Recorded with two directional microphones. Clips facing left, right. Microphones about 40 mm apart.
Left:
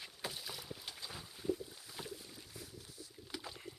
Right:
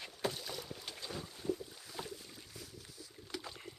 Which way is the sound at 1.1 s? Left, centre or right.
Centre.